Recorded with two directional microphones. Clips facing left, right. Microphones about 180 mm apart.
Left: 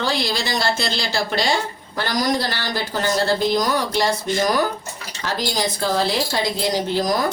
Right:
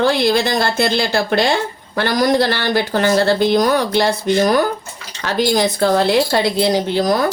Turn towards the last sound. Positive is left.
turn(degrees=-60)  # may be behind; listen again after turning